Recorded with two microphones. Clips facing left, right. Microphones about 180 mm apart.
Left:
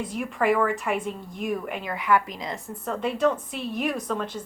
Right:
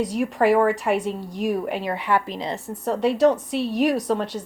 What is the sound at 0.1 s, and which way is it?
A woman's voice, 35° right (ahead or behind).